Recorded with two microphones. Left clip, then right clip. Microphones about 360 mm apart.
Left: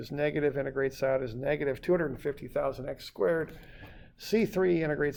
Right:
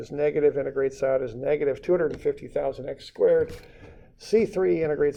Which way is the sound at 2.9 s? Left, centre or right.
Left.